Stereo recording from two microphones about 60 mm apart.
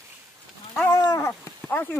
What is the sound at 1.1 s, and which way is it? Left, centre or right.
Dog, left.